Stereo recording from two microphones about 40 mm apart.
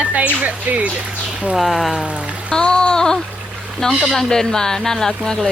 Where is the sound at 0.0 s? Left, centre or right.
Right.